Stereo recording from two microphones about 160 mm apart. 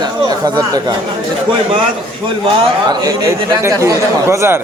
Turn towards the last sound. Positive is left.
turn(degrees=-15)  # may be behind; listen again after turning